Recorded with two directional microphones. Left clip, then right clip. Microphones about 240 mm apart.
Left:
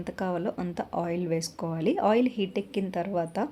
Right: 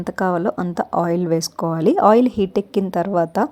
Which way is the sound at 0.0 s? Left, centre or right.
Right.